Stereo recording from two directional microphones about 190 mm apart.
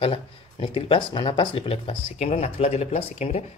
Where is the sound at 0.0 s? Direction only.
30° left (ahead or behind).